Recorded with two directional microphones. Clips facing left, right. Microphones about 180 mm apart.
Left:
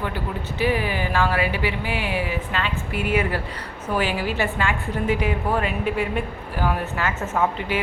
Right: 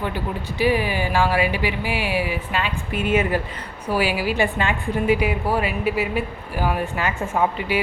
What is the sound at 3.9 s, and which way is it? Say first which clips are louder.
A man's voice: right 2 dB; 10° right (ahead or behind).